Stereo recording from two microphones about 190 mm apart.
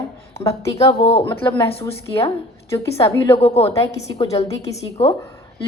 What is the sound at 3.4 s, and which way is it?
A woman's voice, 30° left (ahead or behind).